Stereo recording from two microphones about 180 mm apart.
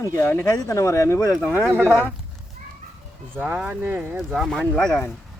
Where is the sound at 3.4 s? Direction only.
10° right (ahead or behind).